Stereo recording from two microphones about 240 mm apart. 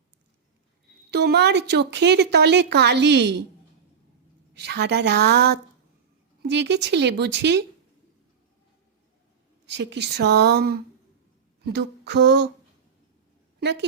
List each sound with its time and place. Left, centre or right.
1.1 s speech: right
4.5 s speech: right
9.6 s speech: right